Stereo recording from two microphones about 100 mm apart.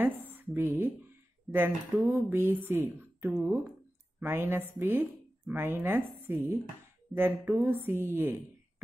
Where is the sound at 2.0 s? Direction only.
20° right (ahead or behind).